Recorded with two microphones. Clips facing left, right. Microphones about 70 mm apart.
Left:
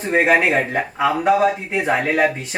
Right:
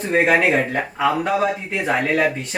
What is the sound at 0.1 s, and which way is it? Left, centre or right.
Speech, centre.